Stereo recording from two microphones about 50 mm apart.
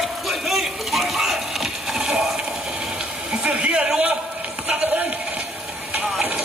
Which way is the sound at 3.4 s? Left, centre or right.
Right.